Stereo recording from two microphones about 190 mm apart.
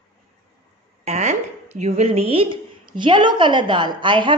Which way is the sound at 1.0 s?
35° right (ahead or behind).